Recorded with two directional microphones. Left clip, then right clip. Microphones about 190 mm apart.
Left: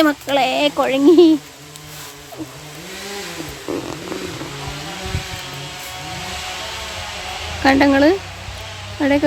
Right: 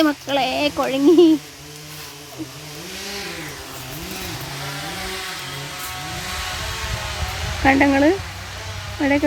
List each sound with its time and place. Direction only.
0.0 s speech: 15° left (ahead or behind)
7.6 s speech: 15° left (ahead or behind)